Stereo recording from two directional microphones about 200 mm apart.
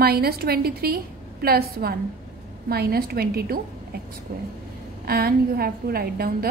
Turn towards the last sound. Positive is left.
turn(degrees=-50)  # may be behind; listen again after turning